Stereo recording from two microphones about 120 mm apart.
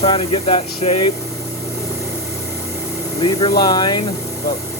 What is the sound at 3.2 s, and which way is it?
Speech, 30° left (ahead or behind).